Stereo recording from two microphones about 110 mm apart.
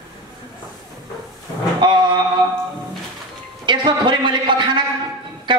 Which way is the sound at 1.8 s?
45° right (ahead or behind).